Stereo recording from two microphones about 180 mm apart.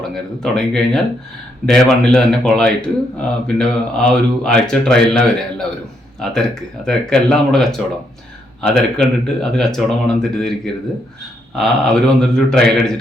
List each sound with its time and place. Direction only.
0.1 s speech: 5° left (ahead or behind)
11.5 s speech: centre (ahead or behind)